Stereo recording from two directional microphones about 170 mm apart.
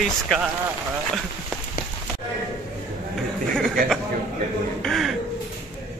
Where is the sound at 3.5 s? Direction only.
5° left (ahead or behind).